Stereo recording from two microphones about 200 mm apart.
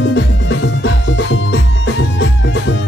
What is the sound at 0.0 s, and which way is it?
Music, 65° left (ahead or behind).